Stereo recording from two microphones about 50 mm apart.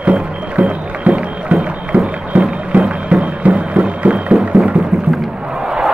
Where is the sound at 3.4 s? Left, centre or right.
Right.